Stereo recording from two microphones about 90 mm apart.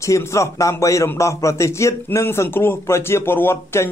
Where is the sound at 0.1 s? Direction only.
35° left (ahead or behind).